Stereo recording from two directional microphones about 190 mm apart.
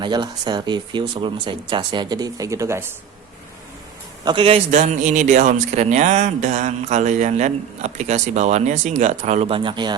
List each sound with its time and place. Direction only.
0.0 s speech: 25° right (ahead or behind)
4.3 s a man's voice: 30° right (ahead or behind)